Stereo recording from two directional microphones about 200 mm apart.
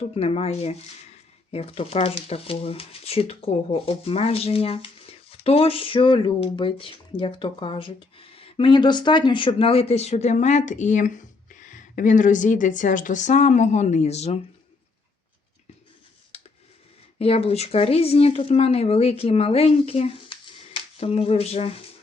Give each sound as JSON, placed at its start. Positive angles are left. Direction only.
{"t": 0.0, "sound": "speech", "side_deg": 30}
{"t": 17.2, "sound": "speech", "side_deg": 30}